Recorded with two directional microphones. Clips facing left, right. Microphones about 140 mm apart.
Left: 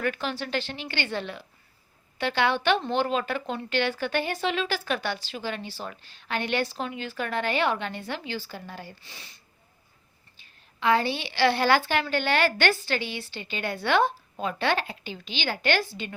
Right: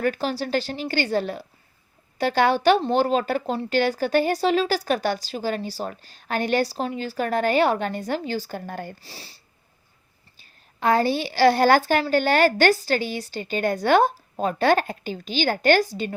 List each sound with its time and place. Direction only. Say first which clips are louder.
0.0 s speech: right 5 dB; 40° right (ahead or behind)
9.0 s a woman's voice: right 5 dB; 35° right (ahead or behind)